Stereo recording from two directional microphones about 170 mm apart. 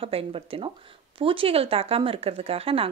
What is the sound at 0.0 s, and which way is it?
Speech, 35° right (ahead or behind).